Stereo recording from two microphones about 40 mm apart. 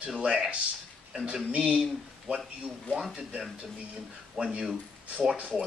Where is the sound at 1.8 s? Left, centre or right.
Centre.